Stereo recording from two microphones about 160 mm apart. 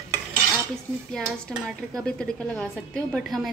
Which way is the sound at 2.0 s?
5° left (ahead or behind).